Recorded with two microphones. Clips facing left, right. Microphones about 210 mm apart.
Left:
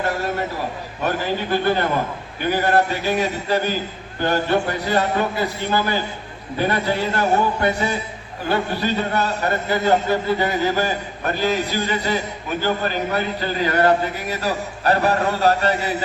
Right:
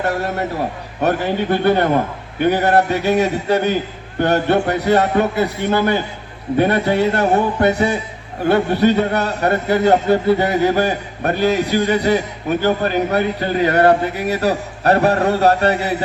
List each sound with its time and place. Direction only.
1.0 s speech: 60° right (ahead or behind)